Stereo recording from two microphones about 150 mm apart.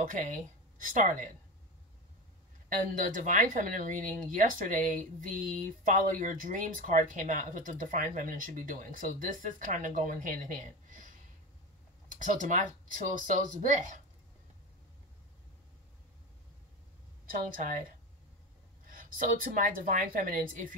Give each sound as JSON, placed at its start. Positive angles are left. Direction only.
{"t": 0.1, "sound": "a woman's voice", "side_deg": -60}
{"t": 2.7, "sound": "speech", "side_deg": -65}
{"t": 12.1, "sound": "speech", "side_deg": -60}
{"t": 17.3, "sound": "speech", "side_deg": -70}